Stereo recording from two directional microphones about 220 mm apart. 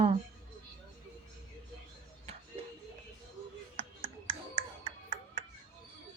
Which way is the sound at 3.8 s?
25° right (ahead or behind).